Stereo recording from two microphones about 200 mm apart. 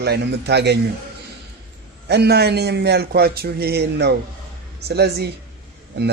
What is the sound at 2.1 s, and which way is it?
Speech, 55° right (ahead or behind).